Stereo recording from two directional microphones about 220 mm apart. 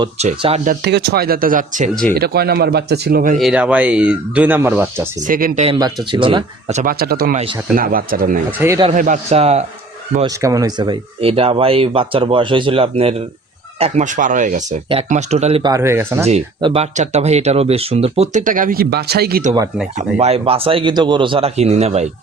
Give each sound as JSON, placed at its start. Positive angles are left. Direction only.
{"t": 0.0, "sound": "speech", "side_deg": -25}
{"t": 3.3, "sound": "speech", "side_deg": -5}
{"t": 5.2, "sound": "speech", "side_deg": -35}
{"t": 6.1, "sound": "speech", "side_deg": -20}
{"t": 8.5, "sound": "speech", "side_deg": -10}
{"t": 8.9, "sound": "speech", "side_deg": -30}
{"t": 10.2, "sound": "speech", "side_deg": -15}
{"t": 15.6, "sound": "speech", "side_deg": -15}
{"t": 16.2, "sound": "speech", "side_deg": -25}
{"t": 20.0, "sound": "speech", "side_deg": -30}